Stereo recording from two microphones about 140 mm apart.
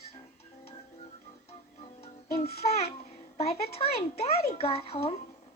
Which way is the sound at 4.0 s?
45° left (ahead or behind).